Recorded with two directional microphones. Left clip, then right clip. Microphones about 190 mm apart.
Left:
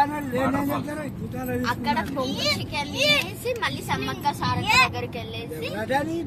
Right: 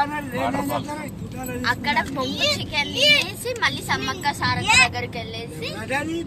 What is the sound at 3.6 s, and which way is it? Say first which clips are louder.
Speech: right 9 dB; 5° left (ahead or behind).